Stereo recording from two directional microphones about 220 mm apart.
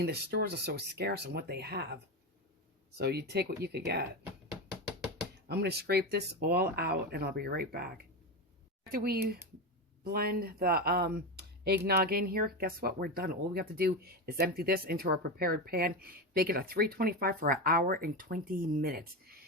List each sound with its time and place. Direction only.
0.0 s speech: 45° right (ahead or behind)
3.0 s speech: 50° right (ahead or behind)
5.5 s speech: 45° right (ahead or behind)
8.9 s speech: 45° right (ahead or behind)